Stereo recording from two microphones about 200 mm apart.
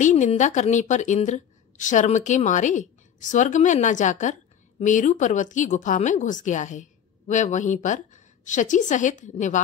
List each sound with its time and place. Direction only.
0.0 s a woman's voice: 35° left (ahead or behind)